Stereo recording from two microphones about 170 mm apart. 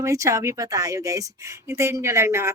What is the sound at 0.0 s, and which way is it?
A woman's voice, 20° right (ahead or behind).